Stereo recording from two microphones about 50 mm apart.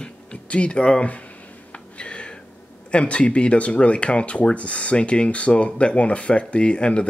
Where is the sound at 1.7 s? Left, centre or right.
Left.